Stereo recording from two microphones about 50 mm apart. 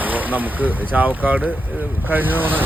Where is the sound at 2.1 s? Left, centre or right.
Right.